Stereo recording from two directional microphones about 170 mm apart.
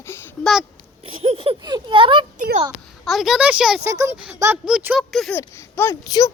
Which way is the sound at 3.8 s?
15° right (ahead or behind).